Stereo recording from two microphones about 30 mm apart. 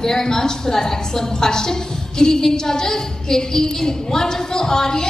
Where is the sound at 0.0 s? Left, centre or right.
Centre.